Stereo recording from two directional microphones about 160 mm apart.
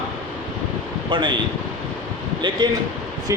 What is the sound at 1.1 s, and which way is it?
Speech, 30° right (ahead or behind).